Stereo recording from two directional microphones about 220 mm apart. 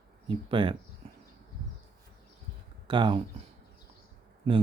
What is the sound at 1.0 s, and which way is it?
Horse, 25° right (ahead or behind).